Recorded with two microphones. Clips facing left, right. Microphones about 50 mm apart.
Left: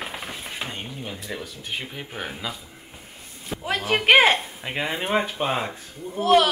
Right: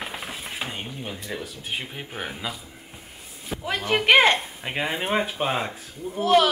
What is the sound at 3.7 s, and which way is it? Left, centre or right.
Speech, centre.